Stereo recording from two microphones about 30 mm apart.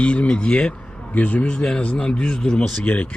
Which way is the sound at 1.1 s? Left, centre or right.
Left.